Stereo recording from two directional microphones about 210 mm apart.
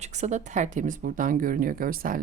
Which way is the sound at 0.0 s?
35° right (ahead or behind).